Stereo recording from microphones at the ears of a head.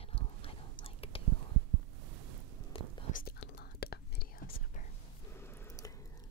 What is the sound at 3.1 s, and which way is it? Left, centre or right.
Whispering, left.